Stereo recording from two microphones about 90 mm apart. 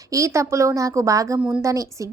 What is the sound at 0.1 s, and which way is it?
A woman's voice, 35° right (ahead or behind).